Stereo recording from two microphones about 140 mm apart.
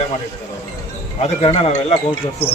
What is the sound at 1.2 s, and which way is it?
Speech, 45° left (ahead or behind).